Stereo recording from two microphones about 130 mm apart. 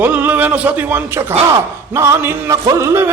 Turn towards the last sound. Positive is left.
turn(degrees=-20)  # may be behind; listen again after turning